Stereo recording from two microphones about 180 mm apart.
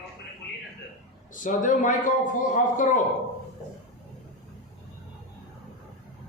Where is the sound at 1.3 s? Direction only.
45° left (ahead or behind).